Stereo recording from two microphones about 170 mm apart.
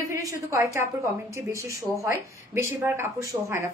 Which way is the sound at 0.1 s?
20° right (ahead or behind).